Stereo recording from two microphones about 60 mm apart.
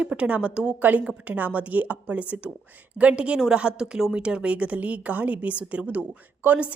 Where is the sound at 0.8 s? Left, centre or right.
Right.